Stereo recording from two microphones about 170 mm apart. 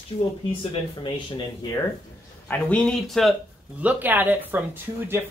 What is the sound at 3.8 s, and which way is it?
Speech, 10° right (ahead or behind).